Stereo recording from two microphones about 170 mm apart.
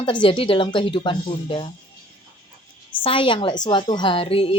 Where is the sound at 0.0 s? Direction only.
30° left (ahead or behind).